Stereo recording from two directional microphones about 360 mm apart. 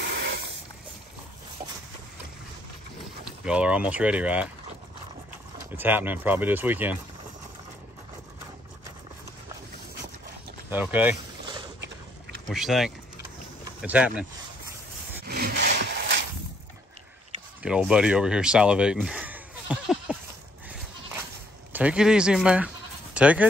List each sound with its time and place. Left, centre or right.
0.0 s a sound: right
3.3 s speech: centre
5.7 s speech: centre
10.7 s speech: centre
12.4 s speech: centre
15.2 s rub: right
17.6 s speech: centre
21.7 s speech: centre